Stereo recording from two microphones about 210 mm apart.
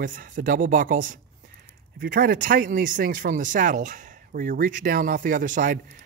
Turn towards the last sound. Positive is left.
turn(degrees=-40)  # may be behind; listen again after turning